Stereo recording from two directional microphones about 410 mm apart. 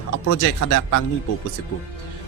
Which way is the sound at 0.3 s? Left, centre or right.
Left.